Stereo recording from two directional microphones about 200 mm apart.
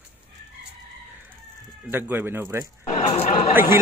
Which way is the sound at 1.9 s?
10° right (ahead or behind).